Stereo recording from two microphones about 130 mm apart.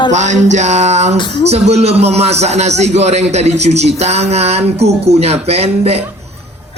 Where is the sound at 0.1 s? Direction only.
65° right (ahead or behind).